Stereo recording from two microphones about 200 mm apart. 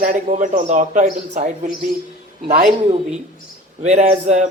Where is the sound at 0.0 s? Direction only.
35° right (ahead or behind).